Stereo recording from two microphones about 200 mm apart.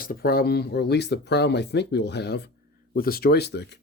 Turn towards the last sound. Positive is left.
turn(degrees=55)  # may be behind; listen again after turning